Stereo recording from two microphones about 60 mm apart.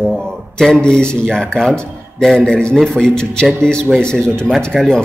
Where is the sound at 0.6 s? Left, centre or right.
Centre.